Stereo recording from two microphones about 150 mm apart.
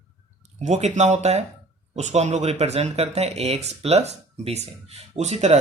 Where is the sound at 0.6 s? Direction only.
50° right (ahead or behind).